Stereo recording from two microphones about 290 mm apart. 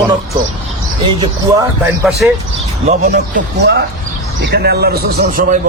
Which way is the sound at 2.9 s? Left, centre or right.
Right.